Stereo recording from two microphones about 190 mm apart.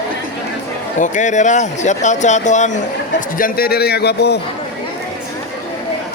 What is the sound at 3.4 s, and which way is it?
A man's voice, 50° left (ahead or behind).